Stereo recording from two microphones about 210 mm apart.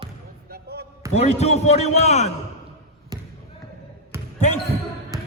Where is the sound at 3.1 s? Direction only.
20° right (ahead or behind).